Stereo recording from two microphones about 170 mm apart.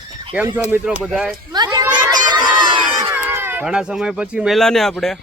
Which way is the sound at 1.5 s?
25° right (ahead or behind).